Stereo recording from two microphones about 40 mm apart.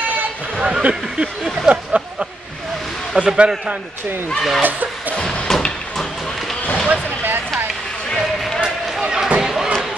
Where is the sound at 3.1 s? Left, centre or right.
Right.